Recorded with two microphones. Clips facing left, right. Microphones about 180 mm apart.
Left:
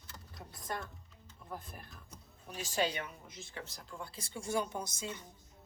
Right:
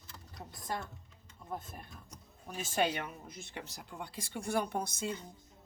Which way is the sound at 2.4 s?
55° right (ahead or behind).